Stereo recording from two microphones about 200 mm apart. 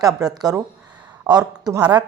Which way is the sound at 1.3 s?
20° right (ahead or behind).